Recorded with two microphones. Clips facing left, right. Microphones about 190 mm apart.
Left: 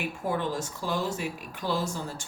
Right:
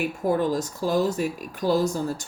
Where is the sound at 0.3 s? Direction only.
40° right (ahead or behind).